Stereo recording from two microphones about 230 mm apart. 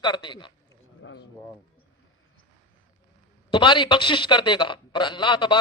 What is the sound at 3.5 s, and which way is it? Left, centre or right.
A man's voice, centre.